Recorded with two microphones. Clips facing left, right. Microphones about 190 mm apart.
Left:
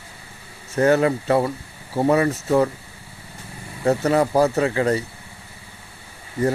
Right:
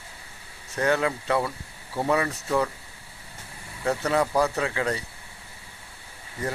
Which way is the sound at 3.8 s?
35° left (ahead or behind).